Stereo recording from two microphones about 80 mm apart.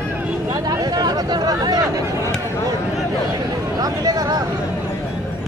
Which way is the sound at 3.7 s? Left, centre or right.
Right.